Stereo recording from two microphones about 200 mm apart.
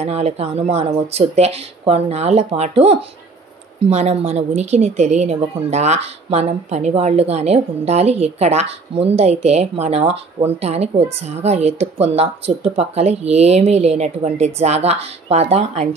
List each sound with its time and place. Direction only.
0.0 s a woman's voice: 30° right (ahead or behind)